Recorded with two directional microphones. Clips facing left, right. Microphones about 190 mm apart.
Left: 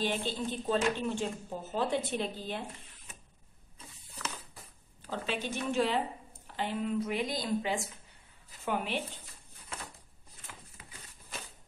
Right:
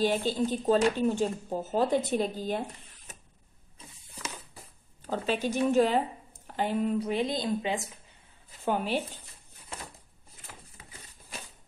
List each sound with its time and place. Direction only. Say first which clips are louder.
0.0 s speech: right 6 dB; 40° right (ahead or behind)
5.0 s speech: right 6 dB; 40° right (ahead or behind); by 7.9 s 20° right (ahead or behind)
8.6 s speech: right 5 dB; 35° right (ahead or behind)